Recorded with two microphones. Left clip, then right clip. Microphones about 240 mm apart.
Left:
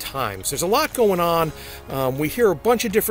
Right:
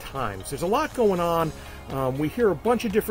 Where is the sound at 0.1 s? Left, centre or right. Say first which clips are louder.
Left 3 dB; centre.